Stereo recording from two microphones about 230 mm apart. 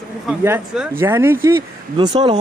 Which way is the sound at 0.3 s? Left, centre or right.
Centre.